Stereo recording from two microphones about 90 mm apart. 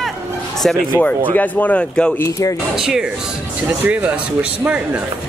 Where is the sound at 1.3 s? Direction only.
20° left (ahead or behind).